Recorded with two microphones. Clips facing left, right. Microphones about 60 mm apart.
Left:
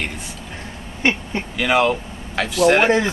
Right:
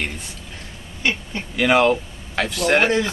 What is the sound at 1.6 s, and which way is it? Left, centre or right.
Speech, centre.